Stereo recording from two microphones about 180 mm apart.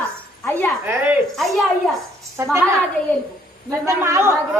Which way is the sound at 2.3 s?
15° right (ahead or behind).